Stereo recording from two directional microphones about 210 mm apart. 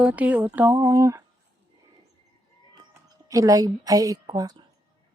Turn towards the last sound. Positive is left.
turn(degrees=-20)  # may be behind; listen again after turning